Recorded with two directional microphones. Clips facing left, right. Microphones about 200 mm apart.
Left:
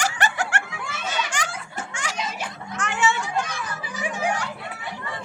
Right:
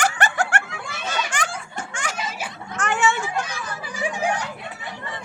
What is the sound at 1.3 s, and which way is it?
Laughter, 55° right (ahead or behind).